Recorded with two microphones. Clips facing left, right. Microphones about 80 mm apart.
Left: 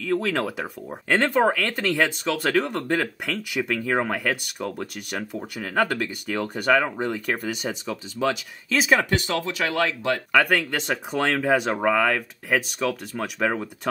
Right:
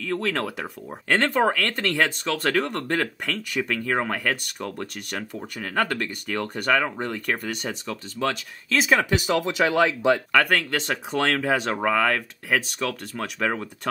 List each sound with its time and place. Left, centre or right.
0.1 s speech: centre
9.1 s speech: centre
10.3 s speech: centre